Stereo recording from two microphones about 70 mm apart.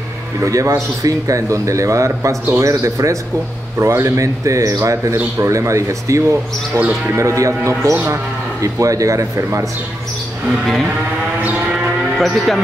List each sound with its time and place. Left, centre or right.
0.4 s speech: right
12.2 s speech: centre